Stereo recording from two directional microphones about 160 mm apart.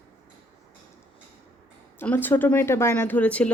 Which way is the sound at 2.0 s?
10° left (ahead or behind).